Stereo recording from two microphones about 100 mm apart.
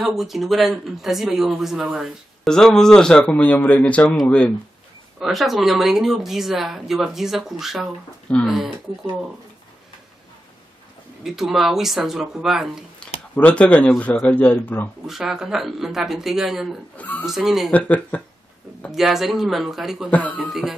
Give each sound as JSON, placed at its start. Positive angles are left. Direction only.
{"t": 0.0, "sound": "speech", "side_deg": -5}
{"t": 5.2, "sound": "speech", "side_deg": 0}
{"t": 11.2, "sound": "speech", "side_deg": -5}
{"t": 13.0, "sound": "speech", "side_deg": 15}
{"t": 15.0, "sound": "speech", "side_deg": -5}
{"t": 16.9, "sound": "speech", "side_deg": 15}
{"t": 17.2, "sound": "speech", "side_deg": 0}
{"t": 17.6, "sound": "speech", "side_deg": 15}
{"t": 18.9, "sound": "speech", "side_deg": -5}
{"t": 20.1, "sound": "speech", "side_deg": 15}